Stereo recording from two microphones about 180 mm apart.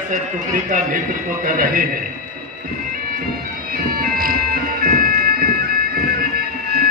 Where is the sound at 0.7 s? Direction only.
50° right (ahead or behind).